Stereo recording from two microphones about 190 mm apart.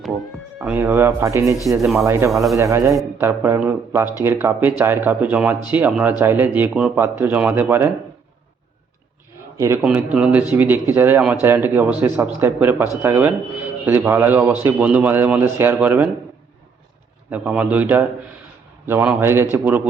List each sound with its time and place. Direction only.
0.6 s speech: 10° right (ahead or behind)
1.7 s speech: centre (ahead or behind)
2.0 s speech: 15° right (ahead or behind)
2.3 s speech: centre (ahead or behind)
2.6 s speech: 15° right (ahead or behind)
9.6 s speech: 10° right (ahead or behind)
17.3 s speech: 5° right (ahead or behind)